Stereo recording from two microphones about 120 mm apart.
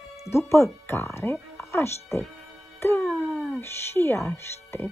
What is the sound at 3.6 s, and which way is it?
A woman's voice, 20° left (ahead or behind).